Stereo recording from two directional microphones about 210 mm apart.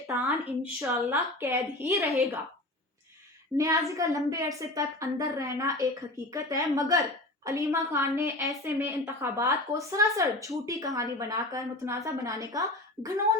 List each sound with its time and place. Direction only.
0.6 s a woman's voice: 15° right (ahead or behind)
3.6 s a woman's voice: 15° right (ahead or behind)